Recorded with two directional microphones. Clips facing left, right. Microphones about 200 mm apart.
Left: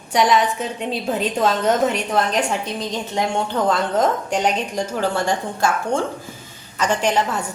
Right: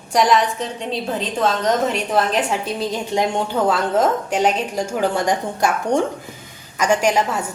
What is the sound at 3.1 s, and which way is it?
Speech, 10° right (ahead or behind).